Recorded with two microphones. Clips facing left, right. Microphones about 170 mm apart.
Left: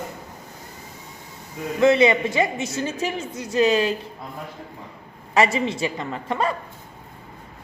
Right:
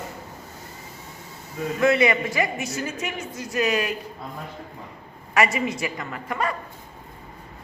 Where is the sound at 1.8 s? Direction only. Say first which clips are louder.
Left 4 dB; 25° left (ahead or behind).